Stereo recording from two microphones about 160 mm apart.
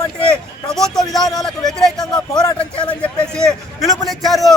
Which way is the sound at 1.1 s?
Centre (ahead or behind).